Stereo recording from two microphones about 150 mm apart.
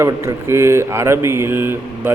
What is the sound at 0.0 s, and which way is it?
Speech, 15° right (ahead or behind).